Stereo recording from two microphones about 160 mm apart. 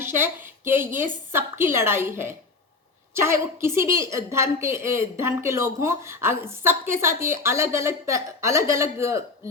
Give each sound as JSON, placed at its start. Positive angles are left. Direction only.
{"t": 0.0, "sound": "a woman's voice", "side_deg": -15}